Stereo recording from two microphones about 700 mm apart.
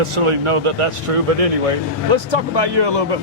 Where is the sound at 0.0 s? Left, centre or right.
Right.